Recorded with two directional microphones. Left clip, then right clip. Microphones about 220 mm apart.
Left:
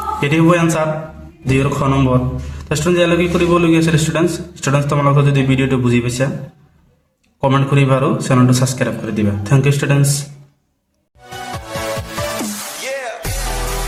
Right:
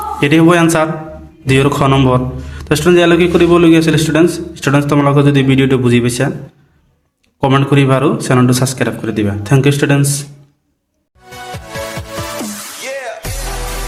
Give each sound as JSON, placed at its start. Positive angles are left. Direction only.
{"t": 0.2, "sound": "a man's voice", "side_deg": -30}
{"t": 7.4, "sound": "a man's voice", "side_deg": -30}
{"t": 11.5, "sound": "music", "side_deg": 0}